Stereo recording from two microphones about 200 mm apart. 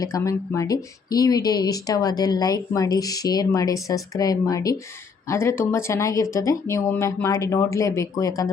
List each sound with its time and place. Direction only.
0.0 s speech: 15° left (ahead or behind)